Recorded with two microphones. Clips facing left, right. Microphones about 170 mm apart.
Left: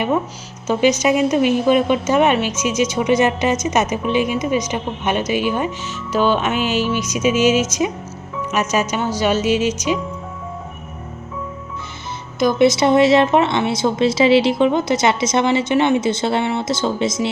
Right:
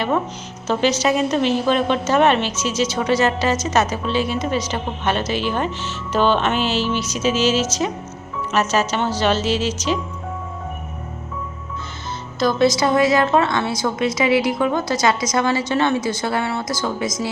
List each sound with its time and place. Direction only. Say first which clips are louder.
0.7 s a woman's voice: left 3 dB; 15° left (ahead or behind)
12.4 s a woman's voice: left 3 dB; 20° left (ahead or behind)